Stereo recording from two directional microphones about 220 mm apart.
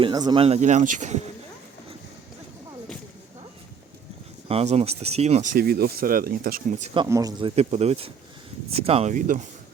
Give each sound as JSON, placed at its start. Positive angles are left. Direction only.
{"t": 0.0, "sound": "speech", "side_deg": -20}
{"t": 4.4, "sound": "speech", "side_deg": -30}